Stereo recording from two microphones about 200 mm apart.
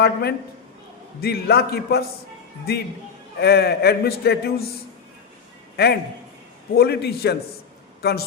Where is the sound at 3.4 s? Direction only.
55° left (ahead or behind).